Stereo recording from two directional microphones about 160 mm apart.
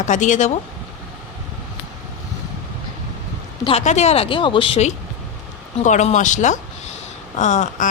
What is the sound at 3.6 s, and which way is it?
Speech, 40° left (ahead or behind).